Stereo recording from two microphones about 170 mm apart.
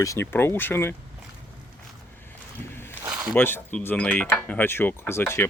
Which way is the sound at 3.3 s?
10° left (ahead or behind).